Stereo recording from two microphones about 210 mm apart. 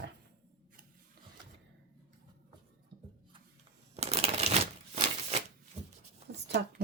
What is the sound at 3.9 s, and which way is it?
Shuffling cards, 30° right (ahead or behind).